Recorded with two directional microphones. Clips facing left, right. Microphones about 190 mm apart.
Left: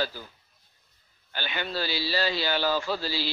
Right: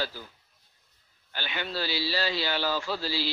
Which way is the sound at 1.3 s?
45° left (ahead or behind).